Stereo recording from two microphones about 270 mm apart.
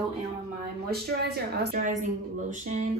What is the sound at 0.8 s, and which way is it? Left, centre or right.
A woman's voice, right.